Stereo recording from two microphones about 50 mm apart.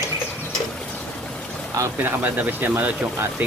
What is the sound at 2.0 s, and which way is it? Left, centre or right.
Speech, right.